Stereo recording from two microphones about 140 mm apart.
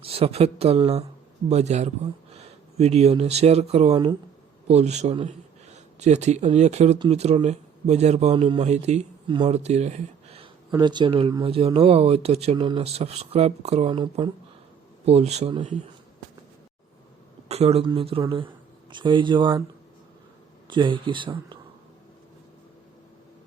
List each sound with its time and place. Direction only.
0.0 s speech: 45° right (ahead or behind)
8.6 s speech: 55° right (ahead or behind)
9.2 s speech: 35° right (ahead or behind)
9.5 s speech: 50° right (ahead or behind)
10.4 s speech: 30° right (ahead or behind)
15.0 s speech: 50° right (ahead or behind)
17.5 s speech: 45° right (ahead or behind)
20.7 s speech: 35° right (ahead or behind)